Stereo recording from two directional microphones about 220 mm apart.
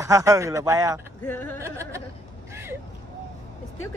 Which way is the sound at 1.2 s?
10° left (ahead or behind).